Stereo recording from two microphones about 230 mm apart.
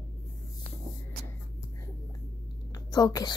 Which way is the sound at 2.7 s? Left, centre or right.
Centre.